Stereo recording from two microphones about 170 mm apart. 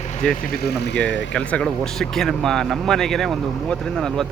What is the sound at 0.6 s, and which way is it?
Speech, 70° left (ahead or behind).